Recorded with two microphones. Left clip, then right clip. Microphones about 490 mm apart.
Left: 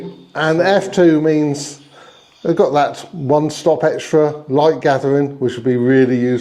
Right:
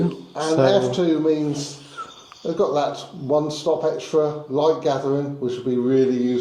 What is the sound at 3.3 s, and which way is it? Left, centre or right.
Speech, left.